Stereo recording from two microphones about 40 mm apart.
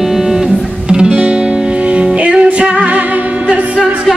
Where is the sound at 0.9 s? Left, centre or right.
Right.